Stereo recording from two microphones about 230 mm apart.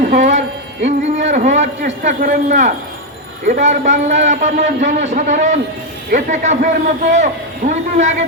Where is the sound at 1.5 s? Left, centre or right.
Right.